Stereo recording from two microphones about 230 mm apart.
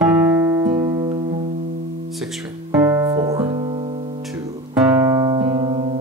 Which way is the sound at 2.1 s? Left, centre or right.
Centre.